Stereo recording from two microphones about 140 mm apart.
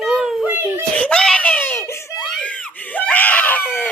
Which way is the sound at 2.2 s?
5° left (ahead or behind).